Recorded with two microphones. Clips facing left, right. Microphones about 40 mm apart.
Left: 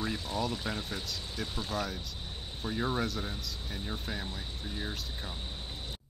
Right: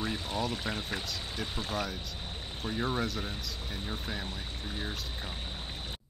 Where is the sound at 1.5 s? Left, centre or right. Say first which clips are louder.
Even; right.